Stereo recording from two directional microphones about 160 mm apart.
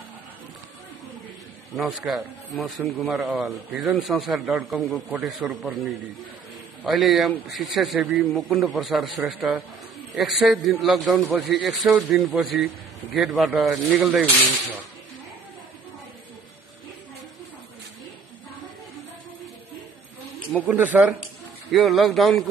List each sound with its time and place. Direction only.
1.8 s speech: 5° right (ahead or behind)
6.8 s speech: centre (ahead or behind)
20.6 s speech: 10° right (ahead or behind)
21.6 s speech: centre (ahead or behind)